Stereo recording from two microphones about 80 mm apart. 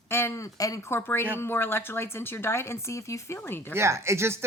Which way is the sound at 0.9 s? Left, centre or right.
Left.